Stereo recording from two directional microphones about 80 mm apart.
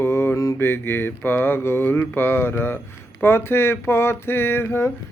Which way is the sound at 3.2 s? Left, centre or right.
Left.